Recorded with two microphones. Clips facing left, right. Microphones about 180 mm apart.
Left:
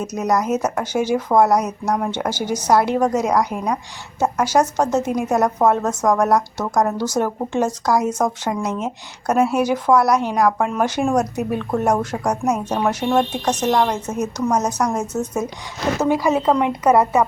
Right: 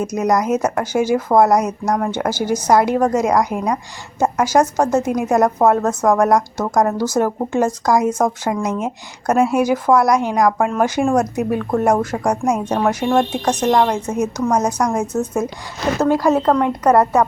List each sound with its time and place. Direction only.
0.0 s a woman's voice: 10° right (ahead or behind)
16.0 s a woman's voice: 10° left (ahead or behind)